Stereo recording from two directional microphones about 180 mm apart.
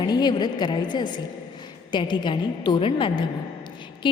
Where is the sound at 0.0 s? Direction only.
25° left (ahead or behind).